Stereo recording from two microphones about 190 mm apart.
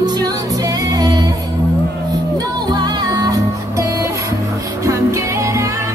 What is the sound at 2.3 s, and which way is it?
Music, 20° right (ahead or behind).